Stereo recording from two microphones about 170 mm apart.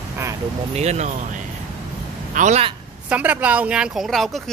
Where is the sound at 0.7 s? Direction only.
40° right (ahead or behind).